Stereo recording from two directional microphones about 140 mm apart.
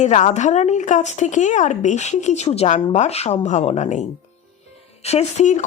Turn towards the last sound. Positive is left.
turn(degrees=55)  # may be behind; listen again after turning